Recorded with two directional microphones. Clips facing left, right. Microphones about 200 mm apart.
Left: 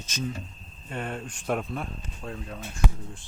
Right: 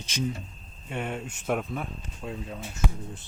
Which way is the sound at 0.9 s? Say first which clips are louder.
Right 1 dB; 10° right (ahead or behind).